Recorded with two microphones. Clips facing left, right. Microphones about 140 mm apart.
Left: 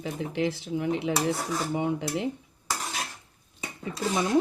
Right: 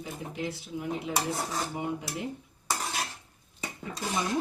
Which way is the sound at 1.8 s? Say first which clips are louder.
Left 6 dB; 90° left.